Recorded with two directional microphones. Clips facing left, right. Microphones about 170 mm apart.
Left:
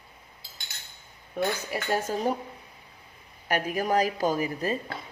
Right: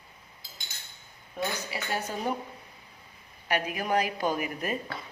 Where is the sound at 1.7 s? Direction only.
45° left (ahead or behind).